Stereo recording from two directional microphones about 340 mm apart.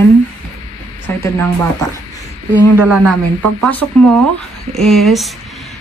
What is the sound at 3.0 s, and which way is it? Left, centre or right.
Speech, right.